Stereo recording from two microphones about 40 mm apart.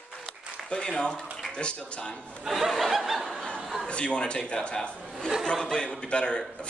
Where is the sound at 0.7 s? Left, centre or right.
Left.